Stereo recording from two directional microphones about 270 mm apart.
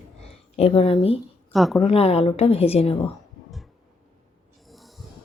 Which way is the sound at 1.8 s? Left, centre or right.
Left.